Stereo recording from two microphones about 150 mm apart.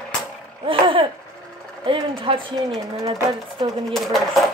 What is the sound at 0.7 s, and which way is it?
Speech, 35° right (ahead or behind).